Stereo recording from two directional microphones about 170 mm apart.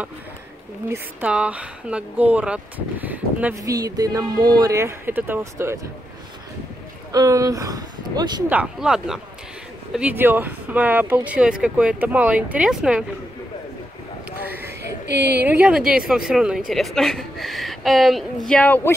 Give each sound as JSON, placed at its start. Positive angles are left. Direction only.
{"t": 0.8, "sound": "speech", "side_deg": -10}
{"t": 3.6, "sound": "speech", "side_deg": -20}
{"t": 7.1, "sound": "speech", "side_deg": -20}
{"t": 8.5, "sound": "a woman's voice", "side_deg": -5}
{"t": 14.4, "sound": "a sound", "side_deg": -10}
{"t": 15.0, "sound": "speech", "side_deg": -75}
{"t": 15.4, "sound": "a woman's voice", "side_deg": -5}